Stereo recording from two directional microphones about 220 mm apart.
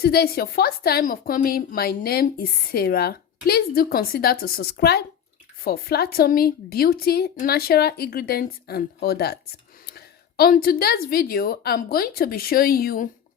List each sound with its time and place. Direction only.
0.0 s a woman's voice: 45° left (ahead or behind)